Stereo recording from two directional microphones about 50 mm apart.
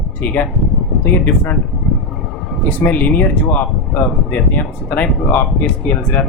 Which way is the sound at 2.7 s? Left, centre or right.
Left.